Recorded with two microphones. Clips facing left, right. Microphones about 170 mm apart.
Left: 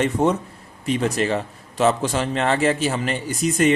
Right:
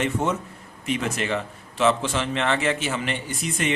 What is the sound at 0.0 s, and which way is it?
A man's voice, 35° left (ahead or behind).